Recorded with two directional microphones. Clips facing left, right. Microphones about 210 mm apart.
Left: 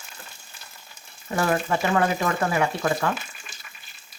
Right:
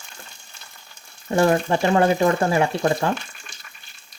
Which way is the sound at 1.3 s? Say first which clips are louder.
Right 5 dB; 25° right (ahead or behind).